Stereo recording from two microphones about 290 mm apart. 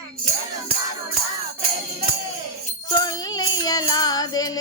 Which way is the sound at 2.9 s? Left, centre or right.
Centre.